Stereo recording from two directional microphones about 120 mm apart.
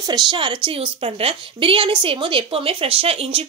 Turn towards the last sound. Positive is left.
turn(degrees=-55)  # may be behind; listen again after turning